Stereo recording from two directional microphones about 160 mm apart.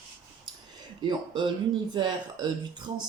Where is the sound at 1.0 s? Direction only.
30° right (ahead or behind).